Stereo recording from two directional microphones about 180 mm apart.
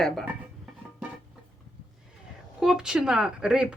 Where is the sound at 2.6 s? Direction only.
5° right (ahead or behind).